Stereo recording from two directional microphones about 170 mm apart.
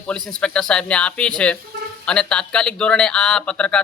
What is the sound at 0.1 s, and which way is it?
Speech, 5° left (ahead or behind).